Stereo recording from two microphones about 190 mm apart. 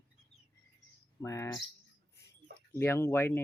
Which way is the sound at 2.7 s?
15° left (ahead or behind).